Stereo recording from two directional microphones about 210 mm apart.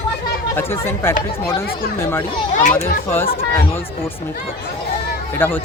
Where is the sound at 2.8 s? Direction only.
45° left (ahead or behind).